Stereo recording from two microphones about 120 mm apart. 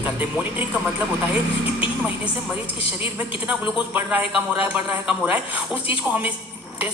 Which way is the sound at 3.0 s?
10° right (ahead or behind).